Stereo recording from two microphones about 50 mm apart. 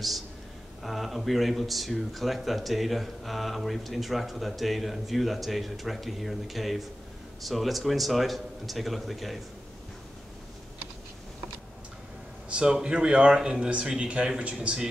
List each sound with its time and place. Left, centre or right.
0.8 s speech: centre
12.4 s a man's voice: centre